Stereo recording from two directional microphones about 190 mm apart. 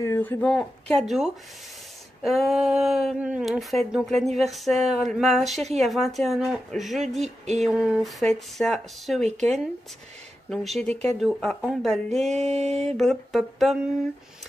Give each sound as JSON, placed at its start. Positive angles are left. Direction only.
{"t": 0.0, "sound": "speech", "side_deg": 15}
{"t": 7.2, "sound": "music", "side_deg": -35}
{"t": 7.6, "sound": "speech", "side_deg": 0}
{"t": 10.5, "sound": "speech", "side_deg": 0}
{"t": 12.3, "sound": "music", "side_deg": -35}
{"t": 12.8, "sound": "speech", "side_deg": 0}